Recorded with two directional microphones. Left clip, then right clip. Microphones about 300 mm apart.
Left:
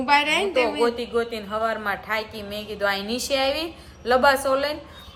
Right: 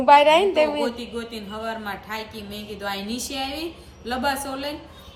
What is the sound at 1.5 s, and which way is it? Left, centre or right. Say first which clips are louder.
Speech: left 3 dB; left.